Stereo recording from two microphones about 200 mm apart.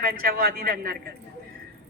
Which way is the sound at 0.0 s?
50° right (ahead or behind).